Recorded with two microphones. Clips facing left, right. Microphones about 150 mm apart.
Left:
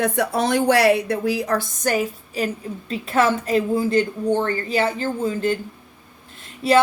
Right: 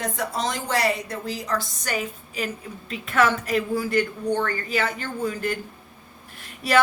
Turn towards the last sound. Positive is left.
turn(degrees=25)  # may be behind; listen again after turning